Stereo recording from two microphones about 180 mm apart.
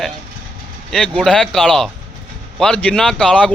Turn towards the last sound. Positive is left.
turn(degrees=5)  # may be behind; listen again after turning